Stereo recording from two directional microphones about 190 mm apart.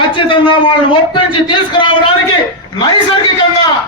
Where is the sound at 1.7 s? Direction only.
25° left (ahead or behind).